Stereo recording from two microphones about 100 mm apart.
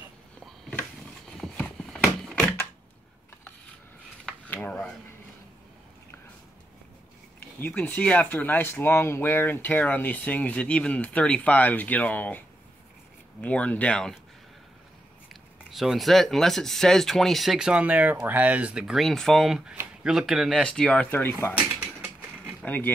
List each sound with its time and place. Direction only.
1.5 s a sound: 15° left (ahead or behind)
1.9 s a sound: centre (ahead or behind)
7.6 s speech: 15° left (ahead or behind)
15.2 s speech: centre (ahead or behind)
20.6 s speech: 10° left (ahead or behind)
21.5 s mechanisms: 15° right (ahead or behind)